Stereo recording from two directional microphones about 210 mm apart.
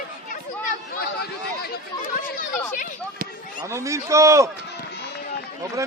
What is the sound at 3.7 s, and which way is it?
Speech, 15° right (ahead or behind).